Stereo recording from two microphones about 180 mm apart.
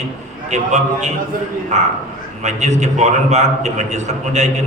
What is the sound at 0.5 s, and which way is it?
A man's voice, 40° right (ahead or behind).